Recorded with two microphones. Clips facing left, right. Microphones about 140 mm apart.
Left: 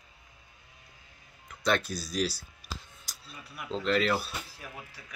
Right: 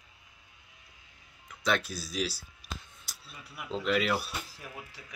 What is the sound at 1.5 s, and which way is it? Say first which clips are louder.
Speech: left 2 dB; 5° right (ahead or behind).